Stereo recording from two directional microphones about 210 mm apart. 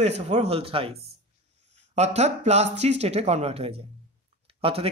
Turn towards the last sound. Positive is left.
turn(degrees=-30)  # may be behind; listen again after turning